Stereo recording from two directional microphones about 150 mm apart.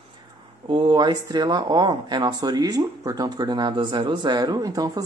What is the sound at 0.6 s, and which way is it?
Speech, 30° right (ahead or behind).